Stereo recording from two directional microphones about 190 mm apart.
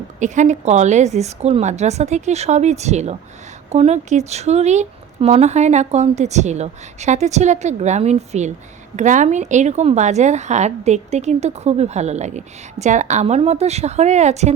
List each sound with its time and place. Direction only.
0.2 s speech: 40° right (ahead or behind)